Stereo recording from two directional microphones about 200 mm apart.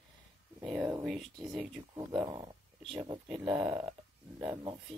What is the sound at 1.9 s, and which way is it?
Speech, 20° right (ahead or behind).